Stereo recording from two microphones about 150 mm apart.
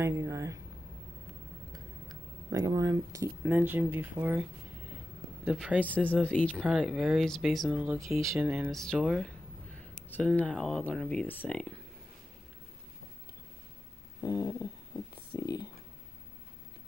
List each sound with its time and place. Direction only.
0.0 s speech: 20° right (ahead or behind)
1.7 s speech: 25° right (ahead or behind); by 5.9 s 10° right (ahead or behind)
5.9 s speech: 10° left (ahead or behind)
6.6 s speech: 5° right (ahead or behind)
7.8 s speech: 10° right (ahead or behind)
10.0 s speech: 10° left (ahead or behind)
14.2 s a sound: 25° left (ahead or behind)